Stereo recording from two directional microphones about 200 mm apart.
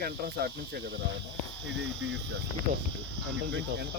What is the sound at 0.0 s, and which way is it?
Speech, 50° right (ahead or behind).